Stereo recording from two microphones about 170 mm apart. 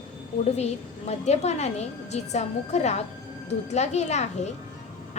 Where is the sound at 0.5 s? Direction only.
40° left (ahead or behind).